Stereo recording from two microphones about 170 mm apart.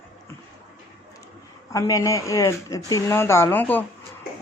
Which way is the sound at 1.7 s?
20° left (ahead or behind).